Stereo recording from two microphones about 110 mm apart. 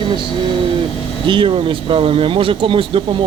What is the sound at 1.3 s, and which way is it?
Speech, 50° right (ahead or behind).